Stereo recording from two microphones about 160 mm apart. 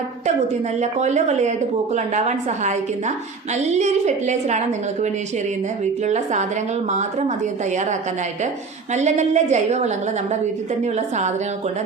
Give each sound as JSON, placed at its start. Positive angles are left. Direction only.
{"t": 0.8, "sound": "a woman's voice", "side_deg": -45}